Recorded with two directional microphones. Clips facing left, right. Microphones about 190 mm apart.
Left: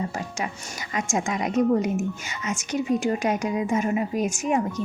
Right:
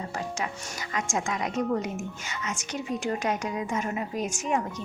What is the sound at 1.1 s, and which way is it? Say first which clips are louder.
A woman's voice: left 6 dB; 15° left (ahead or behind).